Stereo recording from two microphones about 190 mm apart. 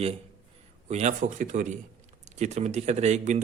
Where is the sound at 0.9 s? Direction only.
35° right (ahead or behind).